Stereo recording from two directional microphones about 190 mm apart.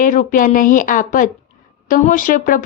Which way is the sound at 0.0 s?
45° left (ahead or behind).